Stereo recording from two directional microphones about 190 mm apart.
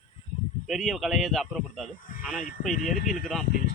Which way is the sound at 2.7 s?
40° left (ahead or behind).